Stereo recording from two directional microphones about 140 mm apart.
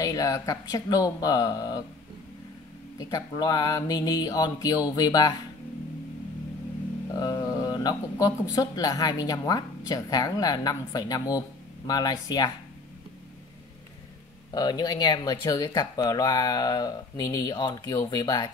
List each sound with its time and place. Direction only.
0.0 s speech: 25° left (ahead or behind)
3.0 s speech: 25° left (ahead or behind)
7.2 s speech: 25° left (ahead or behind)
14.5 s speech: 30° left (ahead or behind)